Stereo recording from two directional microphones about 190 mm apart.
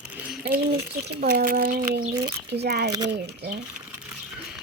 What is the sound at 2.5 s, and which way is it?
Speech, 60° right (ahead or behind).